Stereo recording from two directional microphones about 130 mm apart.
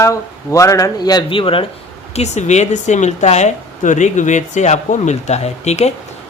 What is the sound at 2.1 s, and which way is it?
Speech, 60° left (ahead or behind).